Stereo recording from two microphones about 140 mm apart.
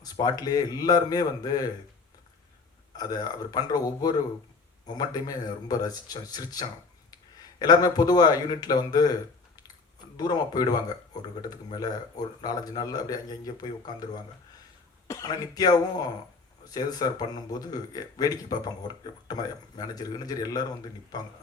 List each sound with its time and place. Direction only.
0.0 s speech: 30° left (ahead or behind)
3.0 s speech: 30° left (ahead or behind)
10.2 s speech: 25° left (ahead or behind)
15.0 s speech: 25° left (ahead or behind)